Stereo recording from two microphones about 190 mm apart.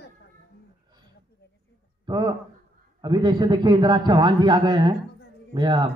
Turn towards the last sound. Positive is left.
turn(degrees=-25)  # may be behind; listen again after turning